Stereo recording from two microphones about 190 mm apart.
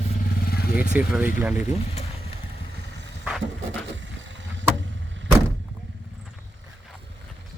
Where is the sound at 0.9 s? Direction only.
10° right (ahead or behind).